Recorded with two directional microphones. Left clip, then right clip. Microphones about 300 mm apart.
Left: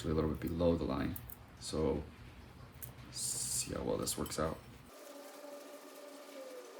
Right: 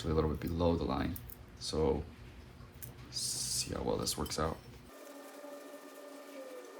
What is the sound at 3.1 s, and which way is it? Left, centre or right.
Owl, right.